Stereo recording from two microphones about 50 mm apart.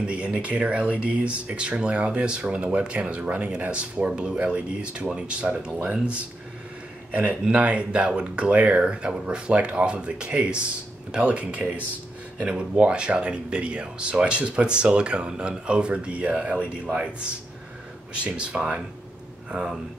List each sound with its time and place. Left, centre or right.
0.0 s speech: centre